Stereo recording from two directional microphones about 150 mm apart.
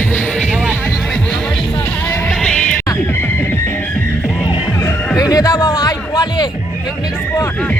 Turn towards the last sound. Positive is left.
turn(degrees=25)  # may be behind; listen again after turning